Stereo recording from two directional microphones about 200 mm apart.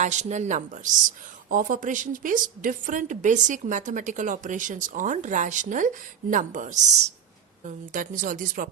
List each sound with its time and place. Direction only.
0.0 s a woman's voice: 35° right (ahead or behind)